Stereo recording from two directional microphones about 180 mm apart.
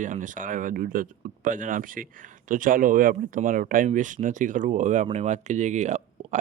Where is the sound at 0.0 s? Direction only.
45° right (ahead or behind).